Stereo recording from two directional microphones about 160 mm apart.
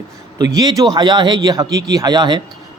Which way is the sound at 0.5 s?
25° right (ahead or behind).